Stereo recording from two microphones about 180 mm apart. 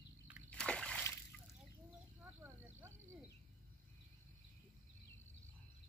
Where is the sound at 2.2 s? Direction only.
10° right (ahead or behind).